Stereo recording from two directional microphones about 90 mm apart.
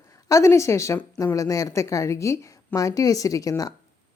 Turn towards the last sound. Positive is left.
turn(degrees=40)  # may be behind; listen again after turning